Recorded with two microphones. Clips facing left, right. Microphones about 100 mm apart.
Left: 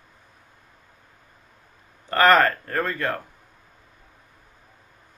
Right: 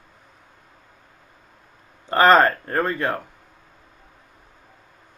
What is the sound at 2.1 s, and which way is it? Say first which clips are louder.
Speech: right 2 dB; 20° right (ahead or behind).